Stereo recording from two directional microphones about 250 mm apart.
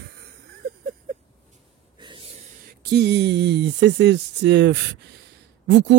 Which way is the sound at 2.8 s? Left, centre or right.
Right.